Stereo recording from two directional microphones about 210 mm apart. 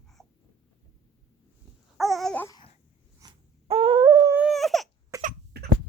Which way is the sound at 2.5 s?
25° left (ahead or behind).